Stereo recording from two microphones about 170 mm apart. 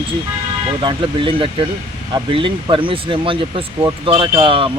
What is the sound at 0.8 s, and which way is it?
Speech, 30° right (ahead or behind).